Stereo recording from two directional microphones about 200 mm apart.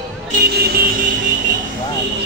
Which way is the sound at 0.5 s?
50° right (ahead or behind).